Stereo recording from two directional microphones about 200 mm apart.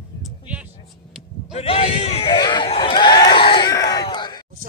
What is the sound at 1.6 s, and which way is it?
Crowd, 30° left (ahead or behind).